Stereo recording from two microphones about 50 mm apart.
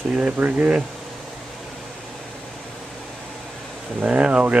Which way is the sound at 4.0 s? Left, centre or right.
Right.